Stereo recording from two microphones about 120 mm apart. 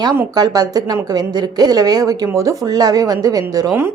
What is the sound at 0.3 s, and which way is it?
A woman's voice, 35° right (ahead or behind).